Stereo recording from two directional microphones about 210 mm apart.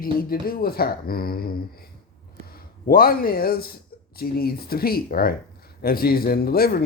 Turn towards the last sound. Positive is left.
turn(degrees=45)  # may be behind; listen again after turning